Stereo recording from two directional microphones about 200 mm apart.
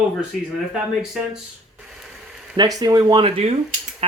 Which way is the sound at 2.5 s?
20° right (ahead or behind).